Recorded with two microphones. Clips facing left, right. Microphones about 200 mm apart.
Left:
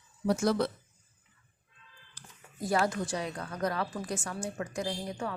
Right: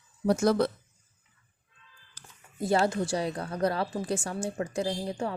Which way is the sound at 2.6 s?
25° right (ahead or behind).